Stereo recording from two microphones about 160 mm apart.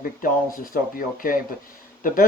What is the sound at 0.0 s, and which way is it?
Speech, 60° left (ahead or behind).